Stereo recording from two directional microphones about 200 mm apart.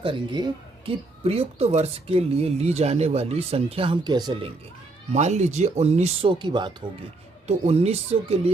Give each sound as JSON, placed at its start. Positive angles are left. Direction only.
{"t": 0.0, "sound": "speech", "side_deg": -25}
{"t": 5.1, "sound": "speech", "side_deg": -35}